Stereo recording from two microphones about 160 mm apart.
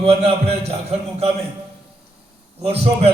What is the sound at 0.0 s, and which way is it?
A man's voice, 40° right (ahead or behind).